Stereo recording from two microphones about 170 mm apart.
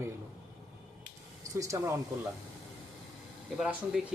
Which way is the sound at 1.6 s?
20° right (ahead or behind).